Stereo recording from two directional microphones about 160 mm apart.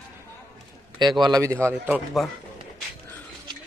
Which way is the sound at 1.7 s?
10° right (ahead or behind).